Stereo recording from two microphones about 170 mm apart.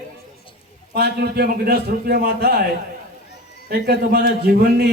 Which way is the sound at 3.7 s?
65° right (ahead or behind).